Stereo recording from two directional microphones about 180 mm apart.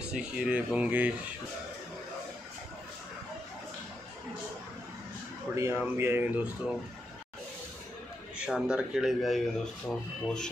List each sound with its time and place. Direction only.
0.1 s speech: 5° right (ahead or behind)
5.5 s speech: 15° right (ahead or behind)
8.4 s speech: 5° right (ahead or behind)